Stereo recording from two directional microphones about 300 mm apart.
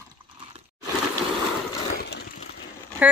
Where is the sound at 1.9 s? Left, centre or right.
Left.